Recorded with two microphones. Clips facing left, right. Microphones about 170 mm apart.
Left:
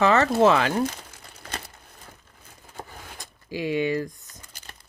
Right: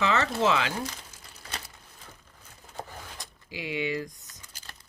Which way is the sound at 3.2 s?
45° left (ahead or behind).